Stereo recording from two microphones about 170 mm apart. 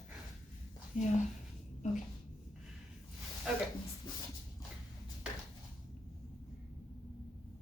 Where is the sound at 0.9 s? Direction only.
50° left (ahead or behind).